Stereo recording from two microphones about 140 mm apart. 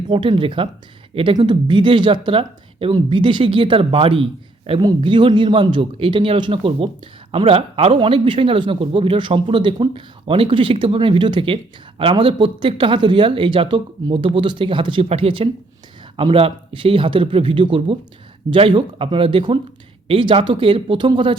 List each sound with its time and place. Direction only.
0.1 s speech: 40° right (ahead or behind)